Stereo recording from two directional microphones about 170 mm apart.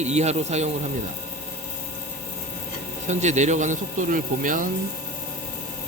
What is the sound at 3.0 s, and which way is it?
Speech, 45° right (ahead or behind).